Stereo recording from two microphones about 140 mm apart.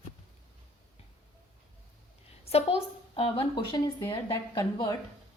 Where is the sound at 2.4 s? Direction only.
45° left (ahead or behind).